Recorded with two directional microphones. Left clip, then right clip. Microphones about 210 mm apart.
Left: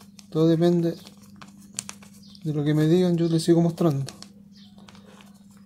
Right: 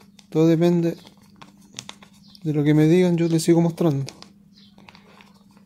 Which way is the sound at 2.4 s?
30° right (ahead or behind).